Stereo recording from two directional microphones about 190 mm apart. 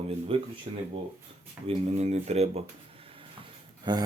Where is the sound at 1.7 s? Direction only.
35° right (ahead or behind).